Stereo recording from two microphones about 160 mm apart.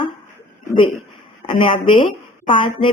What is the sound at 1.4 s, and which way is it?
A woman's voice, 30° left (ahead or behind).